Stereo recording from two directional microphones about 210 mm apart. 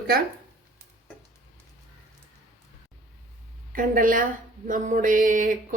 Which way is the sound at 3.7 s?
40° right (ahead or behind).